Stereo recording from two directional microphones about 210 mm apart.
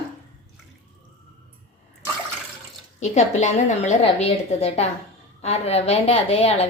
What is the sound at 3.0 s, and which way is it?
A woman's voice, 35° left (ahead or behind).